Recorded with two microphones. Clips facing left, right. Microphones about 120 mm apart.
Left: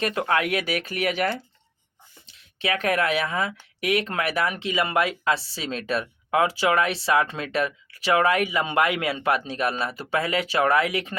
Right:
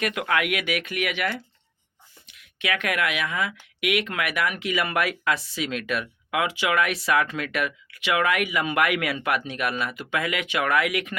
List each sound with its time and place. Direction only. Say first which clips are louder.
0.0 s speech: left 1 dB; 30° left (ahead or behind)